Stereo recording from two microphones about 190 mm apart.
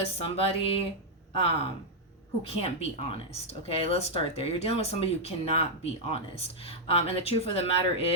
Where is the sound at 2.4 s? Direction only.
35° left (ahead or behind).